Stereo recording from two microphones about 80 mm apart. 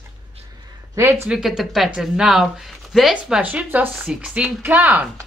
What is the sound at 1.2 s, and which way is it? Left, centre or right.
A woman's voice, centre.